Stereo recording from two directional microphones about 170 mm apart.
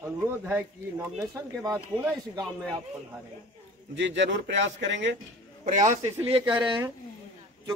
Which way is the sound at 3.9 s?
90° right.